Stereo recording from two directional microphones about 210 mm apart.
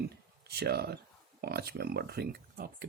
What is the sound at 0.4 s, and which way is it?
Speech, 50° right (ahead or behind).